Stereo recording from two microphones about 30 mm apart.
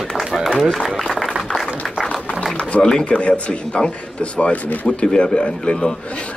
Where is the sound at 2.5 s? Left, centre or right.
Left.